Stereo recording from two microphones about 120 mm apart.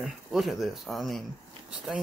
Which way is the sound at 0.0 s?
Centre (ahead or behind).